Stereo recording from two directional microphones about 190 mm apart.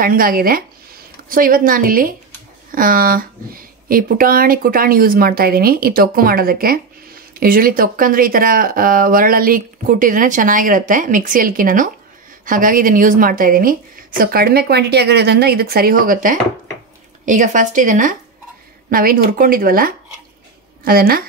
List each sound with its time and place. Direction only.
0.0 s speech: 50° right (ahead or behind)